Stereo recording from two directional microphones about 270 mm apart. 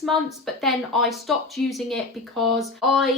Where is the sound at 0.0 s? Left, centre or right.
Centre.